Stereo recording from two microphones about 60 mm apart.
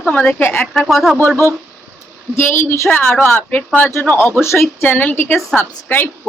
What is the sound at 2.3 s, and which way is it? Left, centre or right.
A woman's voice, left.